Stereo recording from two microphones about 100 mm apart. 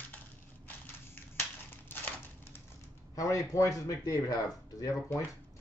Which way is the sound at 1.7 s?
20° left (ahead or behind).